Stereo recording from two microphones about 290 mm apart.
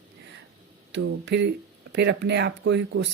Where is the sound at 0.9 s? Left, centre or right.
Right.